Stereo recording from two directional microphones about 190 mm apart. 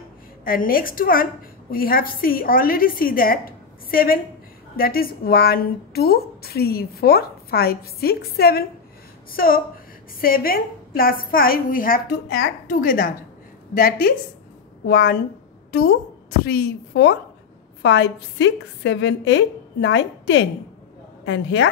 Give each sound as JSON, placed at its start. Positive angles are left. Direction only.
{"t": 0.5, "sound": "a woman's voice", "side_deg": 50}